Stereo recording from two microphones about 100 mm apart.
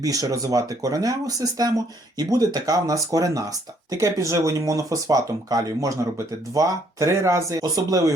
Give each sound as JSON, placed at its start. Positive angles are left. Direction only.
{"t": 0.0, "sound": "speech", "side_deg": -35}